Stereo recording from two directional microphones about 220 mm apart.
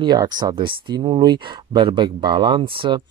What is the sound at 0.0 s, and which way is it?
Speech, 20° right (ahead or behind).